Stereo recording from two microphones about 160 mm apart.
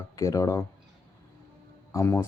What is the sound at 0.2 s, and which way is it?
Speech, 20° left (ahead or behind).